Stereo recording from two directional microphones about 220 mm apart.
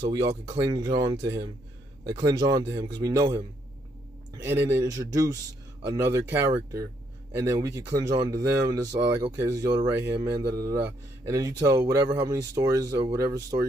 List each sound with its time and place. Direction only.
0.0 s speech: 20° right (ahead or behind)
6.5 s speech: 15° right (ahead or behind)